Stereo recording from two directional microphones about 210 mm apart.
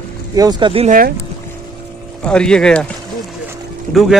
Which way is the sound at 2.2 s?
5° left (ahead or behind).